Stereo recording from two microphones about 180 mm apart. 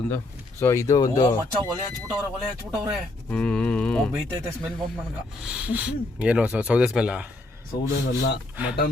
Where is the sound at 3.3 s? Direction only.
5° left (ahead or behind).